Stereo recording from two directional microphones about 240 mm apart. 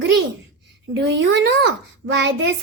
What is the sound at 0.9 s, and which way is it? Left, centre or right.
Speech, right.